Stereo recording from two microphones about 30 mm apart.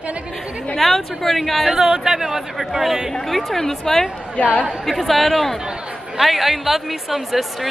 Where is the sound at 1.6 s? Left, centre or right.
Centre.